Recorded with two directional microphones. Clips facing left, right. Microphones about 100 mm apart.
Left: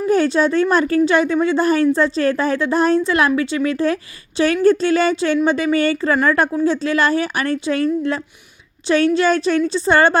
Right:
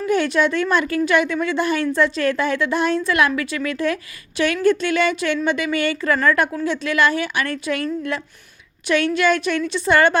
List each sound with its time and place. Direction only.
0.1 s a woman's voice: 35° left (ahead or behind)